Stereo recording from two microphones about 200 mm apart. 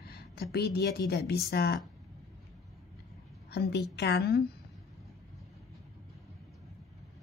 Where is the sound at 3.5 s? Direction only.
55° left (ahead or behind).